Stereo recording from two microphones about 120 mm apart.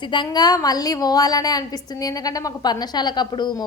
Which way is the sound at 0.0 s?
40° left (ahead or behind).